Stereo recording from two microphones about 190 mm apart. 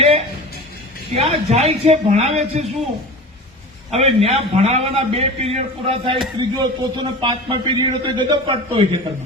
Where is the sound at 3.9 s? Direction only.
30° right (ahead or behind).